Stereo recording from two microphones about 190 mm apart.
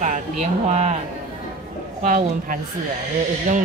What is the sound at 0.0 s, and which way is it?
Speech, 40° right (ahead or behind).